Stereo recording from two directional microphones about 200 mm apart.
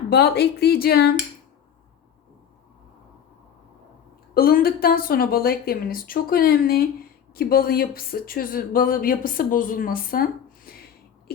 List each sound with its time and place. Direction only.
0.1 s a woman's voice: 55° left (ahead or behind)
4.4 s a woman's voice: 50° left (ahead or behind)